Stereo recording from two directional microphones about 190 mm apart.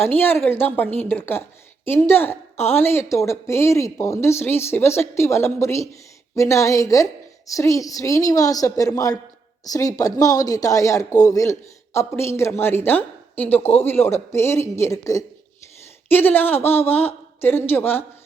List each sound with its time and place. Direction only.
0.0 s a woman's voice: 10° left (ahead or behind)